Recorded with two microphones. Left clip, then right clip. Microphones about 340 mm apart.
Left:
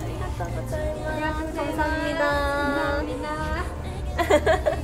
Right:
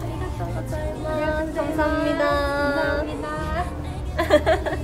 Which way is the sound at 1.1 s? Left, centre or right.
Centre.